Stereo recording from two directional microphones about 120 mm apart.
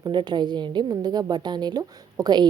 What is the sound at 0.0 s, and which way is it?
A woman's voice, 40° right (ahead or behind).